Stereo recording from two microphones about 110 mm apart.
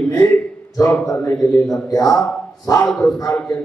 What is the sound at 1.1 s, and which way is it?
A man's voice, 30° left (ahead or behind).